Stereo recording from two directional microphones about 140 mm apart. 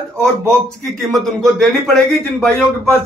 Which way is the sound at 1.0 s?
Centre (ahead or behind).